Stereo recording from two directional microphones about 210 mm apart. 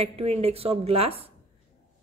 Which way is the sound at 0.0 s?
30° right (ahead or behind).